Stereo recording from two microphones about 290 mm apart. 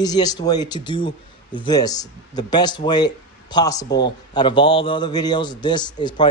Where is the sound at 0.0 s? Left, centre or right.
Centre.